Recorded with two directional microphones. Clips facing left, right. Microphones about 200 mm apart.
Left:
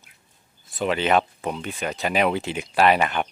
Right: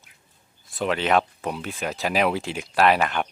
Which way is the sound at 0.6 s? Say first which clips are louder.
Left 1 dB; centre (ahead or behind).